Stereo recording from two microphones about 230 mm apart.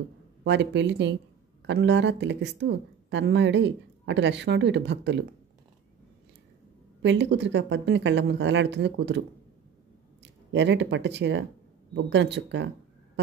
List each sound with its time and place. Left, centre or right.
0.4 s a woman's voice: right
7.0 s a woman's voice: right
10.2 s speech: right